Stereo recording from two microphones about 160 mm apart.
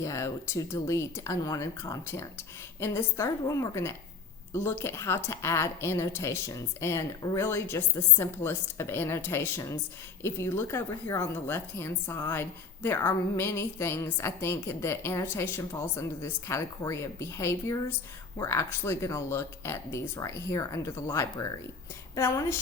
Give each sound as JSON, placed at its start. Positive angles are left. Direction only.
{"t": 0.0, "sound": "a woman's voice", "side_deg": 20}